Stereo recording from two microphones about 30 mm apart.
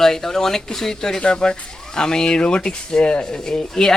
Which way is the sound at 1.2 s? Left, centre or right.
Left.